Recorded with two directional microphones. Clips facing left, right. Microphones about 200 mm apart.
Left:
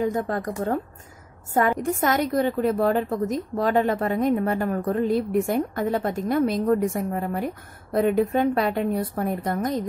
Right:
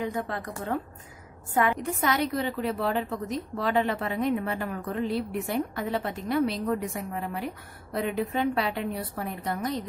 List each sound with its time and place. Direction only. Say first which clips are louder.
0.0 s a woman's voice: left 6 dB; 45° left (ahead or behind)